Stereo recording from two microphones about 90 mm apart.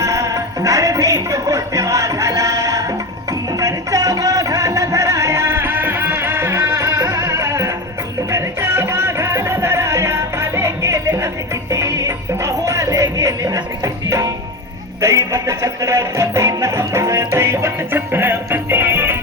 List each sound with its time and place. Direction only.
0.0 s music: 35° right (ahead or behind)